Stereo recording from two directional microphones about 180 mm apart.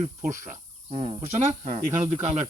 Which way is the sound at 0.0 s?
45° right (ahead or behind).